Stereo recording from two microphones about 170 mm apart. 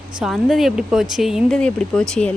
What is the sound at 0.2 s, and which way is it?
Speech, centre (ahead or behind).